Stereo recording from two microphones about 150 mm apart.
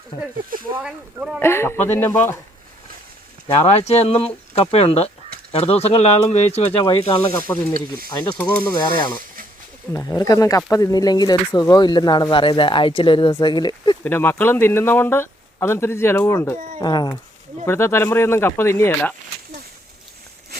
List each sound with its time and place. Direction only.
0.8 s speech: 5° right (ahead or behind)
1.4 s speech: 15° left (ahead or behind)
3.5 s speech: 45° left (ahead or behind)
6.8 s speech: 35° left (ahead or behind)
7.3 s speech: 15° left (ahead or behind)
8.7 s speech: 30° left (ahead or behind)
9.9 s speech: 20° left (ahead or behind)
14.0 s speech: 15° left (ahead or behind)
16.8 s speech: 30° left (ahead or behind)
17.7 s speech: 15° left (ahead or behind)